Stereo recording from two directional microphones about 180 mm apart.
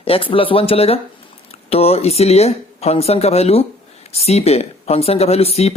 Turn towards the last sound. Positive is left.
turn(degrees=35)  # may be behind; listen again after turning